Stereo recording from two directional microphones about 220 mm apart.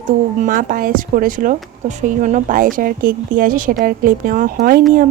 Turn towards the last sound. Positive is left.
turn(degrees=-40)  # may be behind; listen again after turning